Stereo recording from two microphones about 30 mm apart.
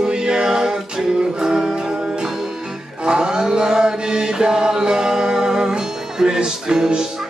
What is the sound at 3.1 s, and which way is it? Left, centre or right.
Chant, right.